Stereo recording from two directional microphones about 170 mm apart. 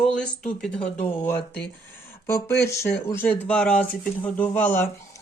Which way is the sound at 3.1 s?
15° left (ahead or behind).